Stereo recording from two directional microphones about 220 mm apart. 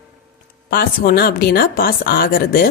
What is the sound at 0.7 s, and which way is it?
Speech, 45° left (ahead or behind).